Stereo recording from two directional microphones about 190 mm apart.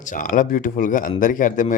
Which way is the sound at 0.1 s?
45° left (ahead or behind).